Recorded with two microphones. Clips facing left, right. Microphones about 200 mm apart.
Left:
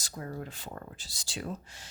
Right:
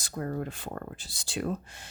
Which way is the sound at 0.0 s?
55° right (ahead or behind).